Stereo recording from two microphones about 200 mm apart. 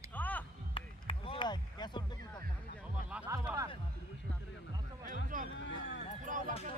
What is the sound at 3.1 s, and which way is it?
Music, 10° right (ahead or behind).